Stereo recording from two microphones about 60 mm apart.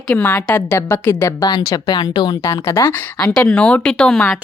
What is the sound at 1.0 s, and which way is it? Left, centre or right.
Speech, left.